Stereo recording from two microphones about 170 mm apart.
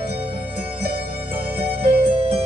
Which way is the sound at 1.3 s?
65° right (ahead or behind).